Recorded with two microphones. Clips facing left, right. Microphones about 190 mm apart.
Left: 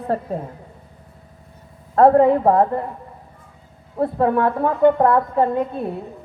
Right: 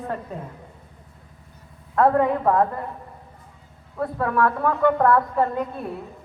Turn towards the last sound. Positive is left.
turn(degrees=25)  # may be behind; listen again after turning